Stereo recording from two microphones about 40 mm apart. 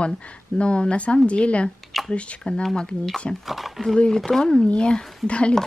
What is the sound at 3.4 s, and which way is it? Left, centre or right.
Speech, centre.